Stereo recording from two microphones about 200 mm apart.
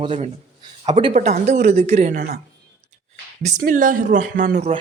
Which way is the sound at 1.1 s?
35° right (ahead or behind).